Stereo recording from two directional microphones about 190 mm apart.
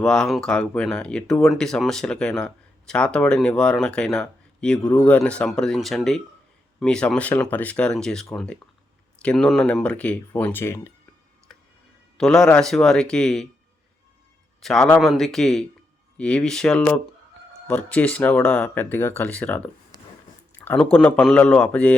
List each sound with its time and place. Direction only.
0.0 s speech: 5° left (ahead or behind)
11.5 s tick-tock: centre (ahead or behind)
12.1 s speech: 5° left (ahead or behind)
14.6 s speech: centre (ahead or behind)
20.9 s speech: 5° left (ahead or behind)